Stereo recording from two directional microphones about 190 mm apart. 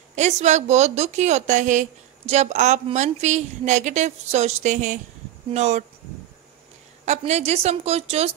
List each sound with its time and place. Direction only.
0.1 s a woman's voice: 35° right (ahead or behind)
7.1 s a woman's voice: 35° right (ahead or behind)